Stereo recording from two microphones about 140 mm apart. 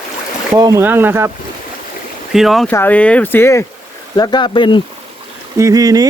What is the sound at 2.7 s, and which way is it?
Speech, 15° left (ahead or behind).